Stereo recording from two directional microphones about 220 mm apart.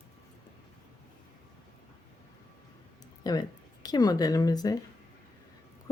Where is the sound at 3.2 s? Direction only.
15° left (ahead or behind).